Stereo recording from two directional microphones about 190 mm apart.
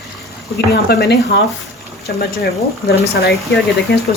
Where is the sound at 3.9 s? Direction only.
60° left (ahead or behind).